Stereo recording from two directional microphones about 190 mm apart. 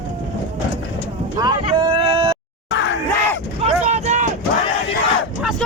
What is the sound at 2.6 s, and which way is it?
Crowd, 75° left (ahead or behind).